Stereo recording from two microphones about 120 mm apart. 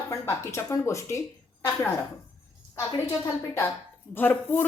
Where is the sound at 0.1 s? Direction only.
25° left (ahead or behind).